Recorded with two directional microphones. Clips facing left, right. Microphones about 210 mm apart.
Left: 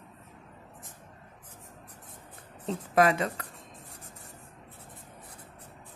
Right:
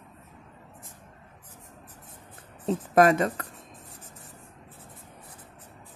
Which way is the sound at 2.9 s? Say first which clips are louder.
Right 4 dB; 45° right (ahead or behind).